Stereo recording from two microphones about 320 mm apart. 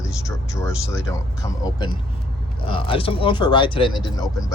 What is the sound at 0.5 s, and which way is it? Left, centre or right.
Speech, centre.